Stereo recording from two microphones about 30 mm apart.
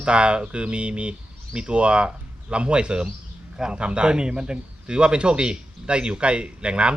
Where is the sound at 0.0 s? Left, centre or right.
Right.